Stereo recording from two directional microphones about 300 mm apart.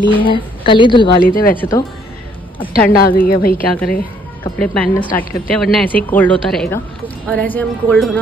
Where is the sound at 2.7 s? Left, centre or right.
Left.